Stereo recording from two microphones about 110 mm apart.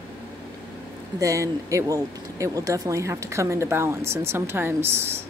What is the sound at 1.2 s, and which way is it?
Speech, 30° right (ahead or behind).